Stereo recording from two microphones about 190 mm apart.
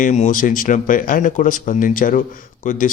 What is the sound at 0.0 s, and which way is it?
Speech, 40° left (ahead or behind).